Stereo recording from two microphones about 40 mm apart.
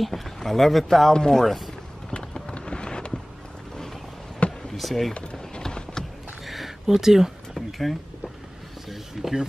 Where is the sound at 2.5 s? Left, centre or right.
Left.